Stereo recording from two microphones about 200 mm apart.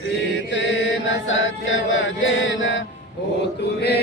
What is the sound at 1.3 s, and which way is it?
Chant, 75° left (ahead or behind).